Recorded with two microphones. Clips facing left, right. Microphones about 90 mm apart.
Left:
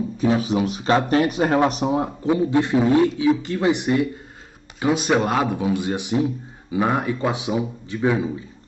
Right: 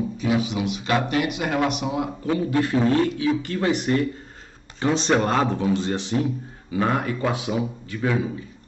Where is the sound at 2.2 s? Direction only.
20° left (ahead or behind).